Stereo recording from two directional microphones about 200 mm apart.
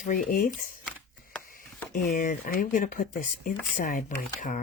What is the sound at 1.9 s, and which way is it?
Speech, 40° left (ahead or behind).